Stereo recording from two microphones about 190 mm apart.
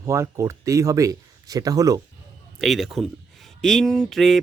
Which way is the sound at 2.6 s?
Centre (ahead or behind).